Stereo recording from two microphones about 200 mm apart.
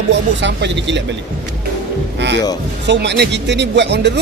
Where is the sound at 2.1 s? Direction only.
60° right (ahead or behind).